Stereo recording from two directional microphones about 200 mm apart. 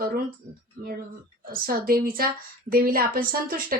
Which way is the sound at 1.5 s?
45° right (ahead or behind).